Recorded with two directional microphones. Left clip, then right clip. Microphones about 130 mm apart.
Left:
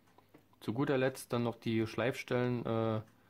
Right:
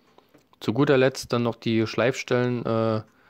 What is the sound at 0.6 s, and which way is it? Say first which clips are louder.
Speech: right 13 dB; 50° right (ahead or behind).